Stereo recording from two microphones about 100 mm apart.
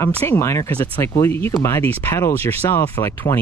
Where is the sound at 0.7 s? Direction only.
20° left (ahead or behind).